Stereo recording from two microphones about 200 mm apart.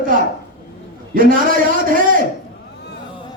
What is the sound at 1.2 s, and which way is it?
Speech, 45° right (ahead or behind).